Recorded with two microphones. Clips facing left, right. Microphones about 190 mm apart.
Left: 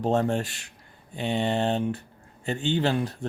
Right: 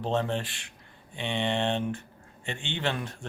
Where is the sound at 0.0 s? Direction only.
45° left (ahead or behind).